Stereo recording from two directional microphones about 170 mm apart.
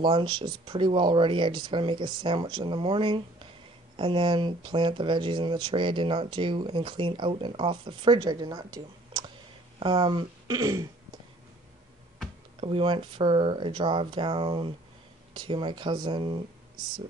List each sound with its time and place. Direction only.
0.0 s speech: 30° right (ahead or behind)
12.5 s speech: 30° right (ahead or behind)